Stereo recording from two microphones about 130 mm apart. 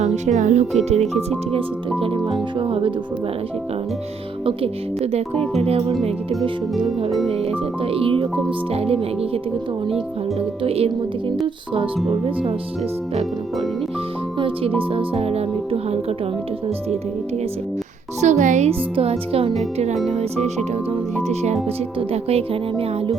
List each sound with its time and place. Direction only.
0.3 s speech: 65° right (ahead or behind)
2.0 s speech: 40° right (ahead or behind)
4.4 s speech: 50° right (ahead or behind)
10.6 s speech: 45° right (ahead or behind)
14.3 s music: 40° right (ahead or behind)
14.8 s speech: 45° right (ahead or behind)
18.2 s a child's voice: 65° right (ahead or behind)
18.7 s speech: 50° right (ahead or behind)
21.9 s speech: 50° right (ahead or behind)